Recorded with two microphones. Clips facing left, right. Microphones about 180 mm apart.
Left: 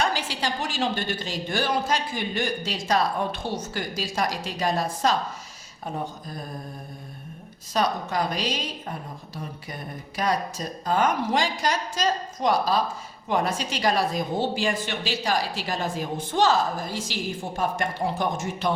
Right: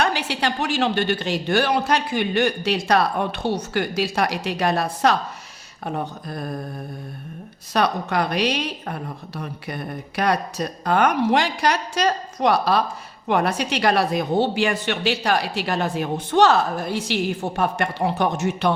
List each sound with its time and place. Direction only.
0.0 s a woman's voice: 65° right (ahead or behind)
7.7 s a woman's voice: 65° right (ahead or behind)